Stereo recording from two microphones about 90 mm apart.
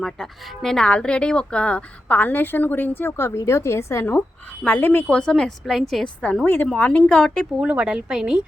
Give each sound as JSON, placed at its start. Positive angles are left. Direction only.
{"t": 0.0, "sound": "speech", "side_deg": 5}
{"t": 4.6, "sound": "speech", "side_deg": 20}
{"t": 5.0, "sound": "a woman's voice", "side_deg": 10}
{"t": 6.4, "sound": "speech", "side_deg": 20}
{"t": 7.6, "sound": "speech", "side_deg": -10}